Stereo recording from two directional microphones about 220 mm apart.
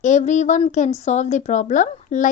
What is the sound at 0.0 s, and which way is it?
Speech, 35° left (ahead or behind).